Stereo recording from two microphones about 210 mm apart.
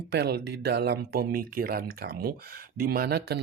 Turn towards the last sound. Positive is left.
turn(degrees=-50)  # may be behind; listen again after turning